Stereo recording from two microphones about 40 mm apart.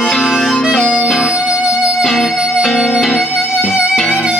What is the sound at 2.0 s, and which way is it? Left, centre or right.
Music, centre.